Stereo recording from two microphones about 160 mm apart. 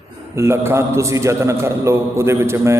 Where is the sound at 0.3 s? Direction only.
15° right (ahead or behind).